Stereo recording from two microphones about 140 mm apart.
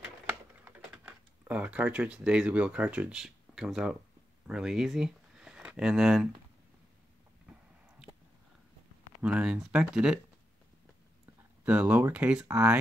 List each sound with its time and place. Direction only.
0.0 s typing: 10° right (ahead or behind)
4.5 s speech: 5° right (ahead or behind)
9.2 s speech: 5° right (ahead or behind)
11.6 s speech: 10° right (ahead or behind)